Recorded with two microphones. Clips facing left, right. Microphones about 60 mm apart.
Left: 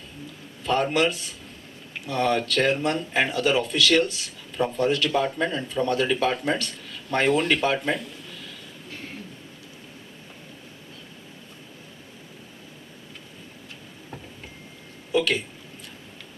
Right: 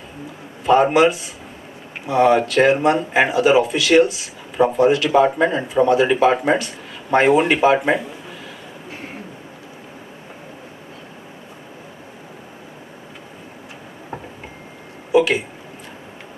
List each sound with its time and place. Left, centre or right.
0.6 s speech: centre
8.9 s a sound: right
15.1 s speech: centre